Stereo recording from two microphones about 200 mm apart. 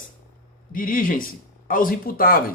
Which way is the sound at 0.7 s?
45° left (ahead or behind).